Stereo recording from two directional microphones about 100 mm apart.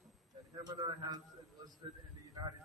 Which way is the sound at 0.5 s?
40° right (ahead or behind).